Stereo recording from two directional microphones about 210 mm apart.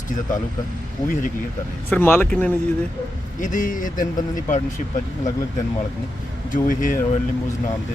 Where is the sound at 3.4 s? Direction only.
40° left (ahead or behind).